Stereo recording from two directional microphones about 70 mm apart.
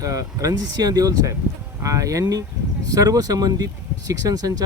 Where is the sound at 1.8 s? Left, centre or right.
Right.